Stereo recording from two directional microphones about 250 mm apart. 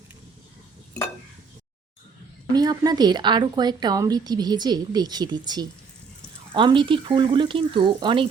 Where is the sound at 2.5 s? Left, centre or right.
Centre.